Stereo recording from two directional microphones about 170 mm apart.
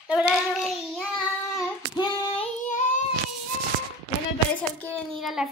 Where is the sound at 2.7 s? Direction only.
50° left (ahead or behind).